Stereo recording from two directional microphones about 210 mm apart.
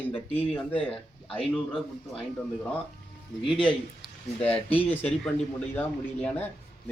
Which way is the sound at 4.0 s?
5° left (ahead or behind).